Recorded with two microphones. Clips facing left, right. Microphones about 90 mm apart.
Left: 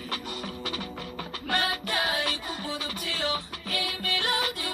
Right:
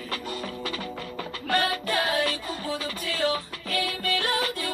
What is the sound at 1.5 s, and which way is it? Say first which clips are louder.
Music: right 4 dB; 20° left (ahead or behind).